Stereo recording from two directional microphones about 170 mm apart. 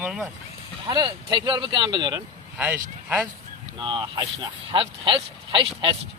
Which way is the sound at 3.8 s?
25° right (ahead or behind).